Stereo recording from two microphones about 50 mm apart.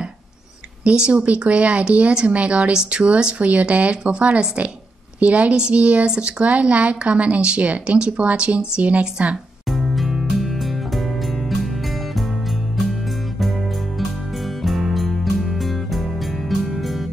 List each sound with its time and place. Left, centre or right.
0.8 s speech: right
9.7 s music: centre
13.4 s music: centre